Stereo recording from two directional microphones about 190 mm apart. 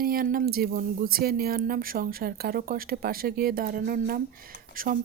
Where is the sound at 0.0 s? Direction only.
50° right (ahead or behind).